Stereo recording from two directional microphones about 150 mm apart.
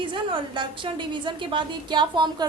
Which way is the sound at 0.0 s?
35° right (ahead or behind).